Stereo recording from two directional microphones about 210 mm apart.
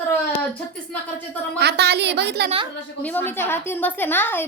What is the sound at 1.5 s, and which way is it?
Speech, 50° right (ahead or behind).